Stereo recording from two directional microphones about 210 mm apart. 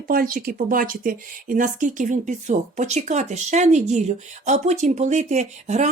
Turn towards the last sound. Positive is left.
turn(degrees=-35)  # may be behind; listen again after turning